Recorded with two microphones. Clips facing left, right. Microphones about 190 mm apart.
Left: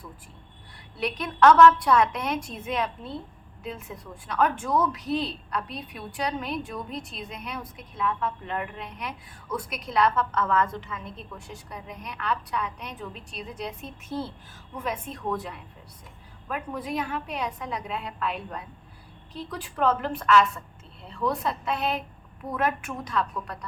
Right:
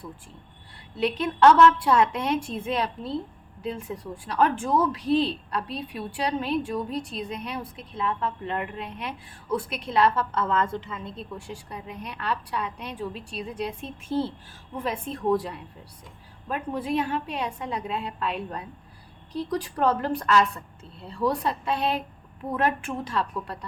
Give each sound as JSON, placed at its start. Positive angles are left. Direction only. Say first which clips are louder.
{"t": 0.9, "sound": "a woman's voice", "louder": "right 3 dB", "side_deg": -25}